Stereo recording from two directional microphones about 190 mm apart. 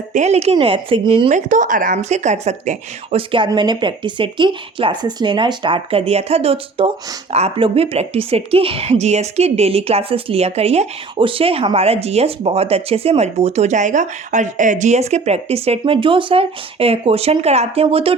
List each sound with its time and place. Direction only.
0.1 s a woman's voice: 35° right (ahead or behind)
1.3 s a woman's voice: 40° right (ahead or behind)